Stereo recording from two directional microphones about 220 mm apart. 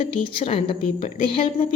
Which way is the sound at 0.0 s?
25° left (ahead or behind).